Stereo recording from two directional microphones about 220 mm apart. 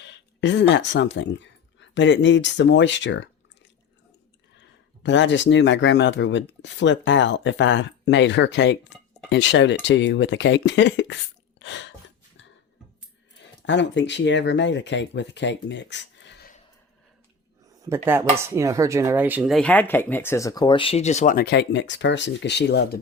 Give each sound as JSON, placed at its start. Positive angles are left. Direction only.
{"t": 0.0, "sound": "speech", "side_deg": 55}
{"t": 5.0, "sound": "speech", "side_deg": 55}
{"t": 11.6, "sound": "a sound", "side_deg": 55}
{"t": 13.7, "sound": "speech", "side_deg": 55}
{"t": 17.8, "sound": "speech", "side_deg": -10}